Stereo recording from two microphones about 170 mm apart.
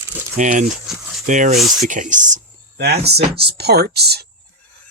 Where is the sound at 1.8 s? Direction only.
50° right (ahead or behind).